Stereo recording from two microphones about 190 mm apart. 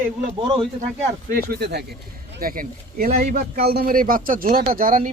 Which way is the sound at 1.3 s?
55° right (ahead or behind).